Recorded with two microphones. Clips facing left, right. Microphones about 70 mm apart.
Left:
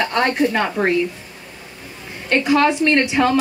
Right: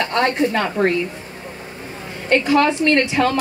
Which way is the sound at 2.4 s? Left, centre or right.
Left.